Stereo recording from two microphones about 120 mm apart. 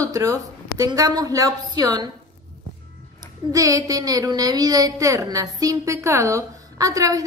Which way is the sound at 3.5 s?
30° right (ahead or behind).